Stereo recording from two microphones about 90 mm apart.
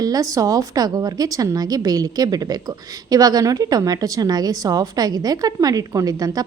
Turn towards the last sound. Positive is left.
turn(degrees=-45)  # may be behind; listen again after turning